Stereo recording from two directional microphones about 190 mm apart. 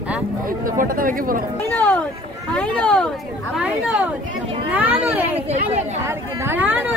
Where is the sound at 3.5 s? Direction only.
5° right (ahead or behind).